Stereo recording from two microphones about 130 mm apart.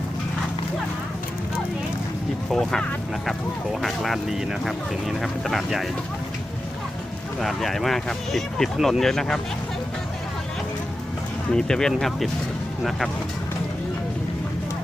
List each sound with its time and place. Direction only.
2.5 s speech: centre (ahead or behind)
7.3 s speech: centre (ahead or behind)
11.5 s speech: 5° left (ahead or behind)